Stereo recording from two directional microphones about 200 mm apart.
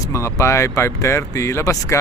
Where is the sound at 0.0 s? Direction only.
15° left (ahead or behind).